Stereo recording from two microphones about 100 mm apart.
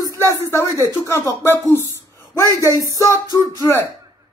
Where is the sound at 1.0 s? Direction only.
30° left (ahead or behind).